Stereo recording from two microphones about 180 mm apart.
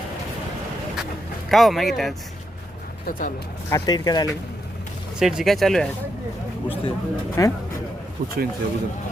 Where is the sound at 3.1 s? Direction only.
50° left (ahead or behind).